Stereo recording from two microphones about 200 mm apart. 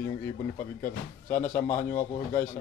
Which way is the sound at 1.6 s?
40° left (ahead or behind).